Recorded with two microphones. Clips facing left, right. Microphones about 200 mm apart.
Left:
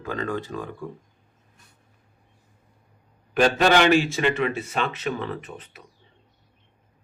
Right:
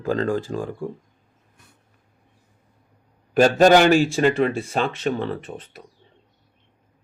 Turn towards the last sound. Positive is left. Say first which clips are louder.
# right 4 dB
turn(degrees=-30)  # may be behind; listen again after turning